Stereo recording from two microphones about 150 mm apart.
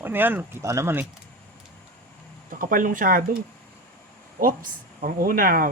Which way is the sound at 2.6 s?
65° right (ahead or behind).